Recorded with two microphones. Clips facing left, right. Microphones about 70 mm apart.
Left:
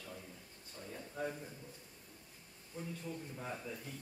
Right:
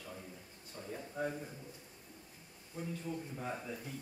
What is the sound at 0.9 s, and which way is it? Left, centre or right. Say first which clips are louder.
Speech: right 3 dB; centre.